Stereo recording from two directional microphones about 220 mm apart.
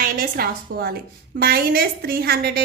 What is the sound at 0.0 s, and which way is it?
A woman's voice, 40° right (ahead or behind).